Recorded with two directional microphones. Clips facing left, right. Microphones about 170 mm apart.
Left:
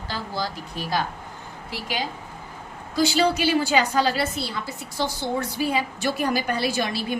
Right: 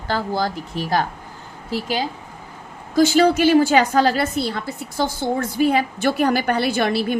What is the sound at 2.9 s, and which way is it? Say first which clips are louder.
A woman's voice: right 6 dB; 50° right (ahead or behind).